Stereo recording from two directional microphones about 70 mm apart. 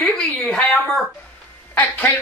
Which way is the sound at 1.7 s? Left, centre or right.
Left.